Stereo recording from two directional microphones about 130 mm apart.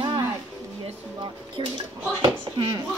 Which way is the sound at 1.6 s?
35° right (ahead or behind).